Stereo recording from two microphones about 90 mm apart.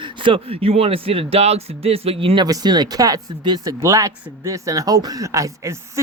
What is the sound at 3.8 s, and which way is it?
Speech, 35° right (ahead or behind).